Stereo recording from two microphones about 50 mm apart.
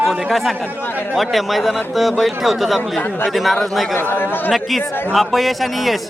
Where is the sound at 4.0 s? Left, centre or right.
Left.